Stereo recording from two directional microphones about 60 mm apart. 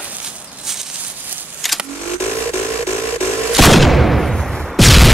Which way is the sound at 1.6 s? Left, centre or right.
Centre.